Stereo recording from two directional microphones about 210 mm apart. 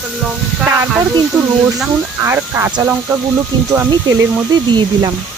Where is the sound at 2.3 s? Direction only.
10° right (ahead or behind).